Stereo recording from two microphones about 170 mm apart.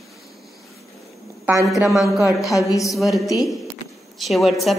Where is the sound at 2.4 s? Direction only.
20° left (ahead or behind).